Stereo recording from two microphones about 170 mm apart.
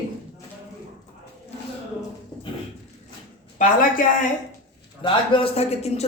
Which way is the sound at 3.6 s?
50° left (ahead or behind).